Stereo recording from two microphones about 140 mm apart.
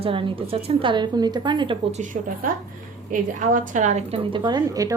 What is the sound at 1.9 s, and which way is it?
A woman's voice, 65° right (ahead or behind).